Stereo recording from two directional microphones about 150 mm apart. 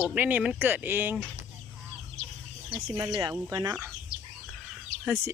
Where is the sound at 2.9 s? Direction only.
20° right (ahead or behind).